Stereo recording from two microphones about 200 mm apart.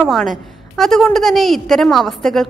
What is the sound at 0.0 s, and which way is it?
A woman's voice, centre (ahead or behind).